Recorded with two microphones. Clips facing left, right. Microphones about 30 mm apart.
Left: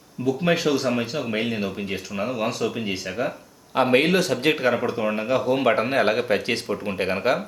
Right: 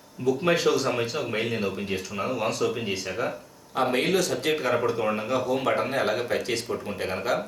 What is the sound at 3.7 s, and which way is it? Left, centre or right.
Speech, left.